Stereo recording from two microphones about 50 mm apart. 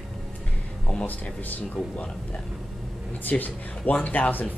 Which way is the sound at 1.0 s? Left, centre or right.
Left.